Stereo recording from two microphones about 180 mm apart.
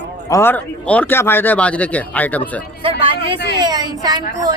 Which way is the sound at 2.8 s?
30° right (ahead or behind).